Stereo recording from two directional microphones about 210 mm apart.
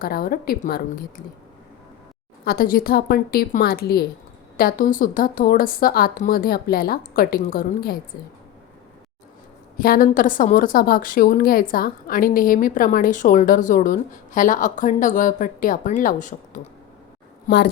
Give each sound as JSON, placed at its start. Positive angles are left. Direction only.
{"t": 0.0, "sound": "a woman's voice", "side_deg": 45}
{"t": 2.4, "sound": "a woman's voice", "side_deg": 45}
{"t": 9.8, "sound": "a woman's voice", "side_deg": 45}